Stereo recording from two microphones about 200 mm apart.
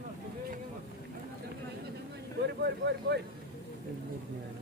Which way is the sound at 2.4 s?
55° right (ahead or behind).